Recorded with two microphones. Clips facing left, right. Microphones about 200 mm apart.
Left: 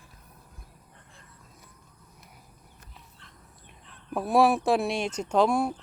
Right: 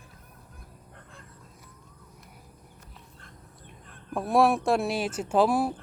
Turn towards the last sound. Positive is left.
turn(degrees=-5)  # may be behind; listen again after turning